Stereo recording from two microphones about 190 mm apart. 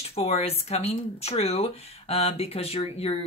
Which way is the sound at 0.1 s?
35° left (ahead or behind).